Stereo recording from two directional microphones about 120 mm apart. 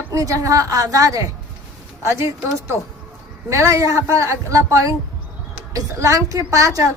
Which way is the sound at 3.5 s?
25° right (ahead or behind).